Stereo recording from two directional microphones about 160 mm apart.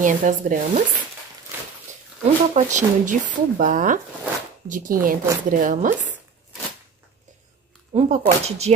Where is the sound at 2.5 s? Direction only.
50° right (ahead or behind).